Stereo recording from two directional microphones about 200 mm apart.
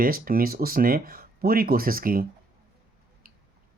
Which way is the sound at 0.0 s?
45° right (ahead or behind).